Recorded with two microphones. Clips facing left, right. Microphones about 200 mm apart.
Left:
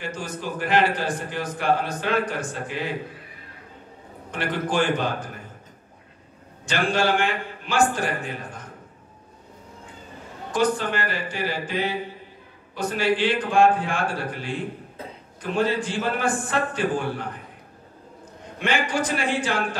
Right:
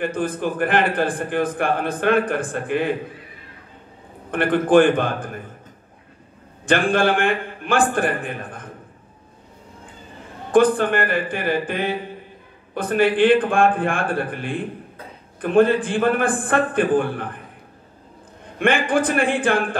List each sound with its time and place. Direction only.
0.0 s a man's voice: 55° right (ahead or behind)
4.3 s a man's voice: 55° right (ahead or behind)
6.6 s a man's voice: 55° right (ahead or behind)
10.5 s a man's voice: 55° right (ahead or behind)
18.6 s a man's voice: 55° right (ahead or behind)